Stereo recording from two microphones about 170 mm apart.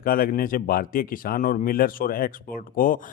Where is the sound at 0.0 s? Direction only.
60° left (ahead or behind).